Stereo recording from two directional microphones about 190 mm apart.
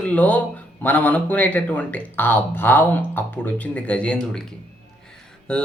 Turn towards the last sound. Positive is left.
turn(degrees=5)  # may be behind; listen again after turning